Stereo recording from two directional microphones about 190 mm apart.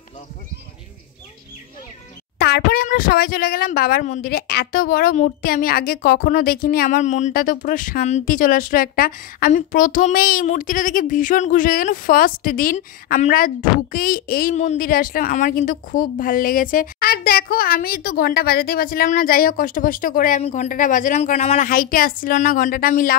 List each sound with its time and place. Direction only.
2.3 s speech: 55° left (ahead or behind)